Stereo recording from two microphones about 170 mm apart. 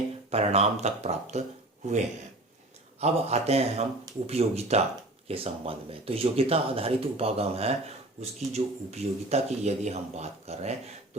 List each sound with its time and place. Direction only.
0.3 s speech: 40° right (ahead or behind)
3.0 s speech: 40° right (ahead or behind)